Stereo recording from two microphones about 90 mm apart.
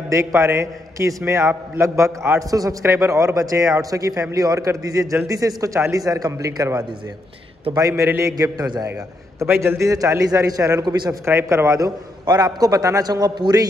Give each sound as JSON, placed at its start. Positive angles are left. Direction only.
{"t": 0.1, "sound": "a man's voice", "side_deg": -35}
{"t": 7.9, "sound": "a man's voice", "side_deg": -30}
{"t": 9.4, "sound": "a man's voice", "side_deg": -30}